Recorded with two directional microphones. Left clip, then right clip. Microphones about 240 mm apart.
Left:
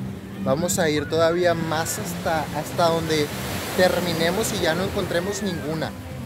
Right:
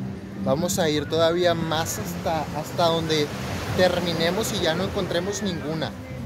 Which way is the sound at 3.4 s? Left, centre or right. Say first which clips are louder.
Left 2 dB; left.